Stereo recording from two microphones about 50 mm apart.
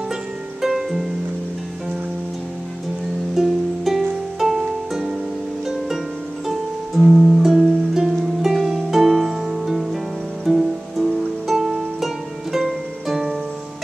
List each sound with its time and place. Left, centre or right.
0.6 s music: centre
3.3 s music: centre
7.0 s music: centre